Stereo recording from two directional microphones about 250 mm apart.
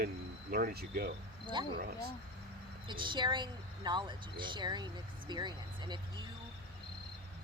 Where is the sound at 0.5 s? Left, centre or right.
Right.